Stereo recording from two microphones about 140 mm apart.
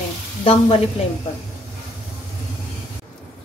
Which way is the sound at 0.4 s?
40° left (ahead or behind).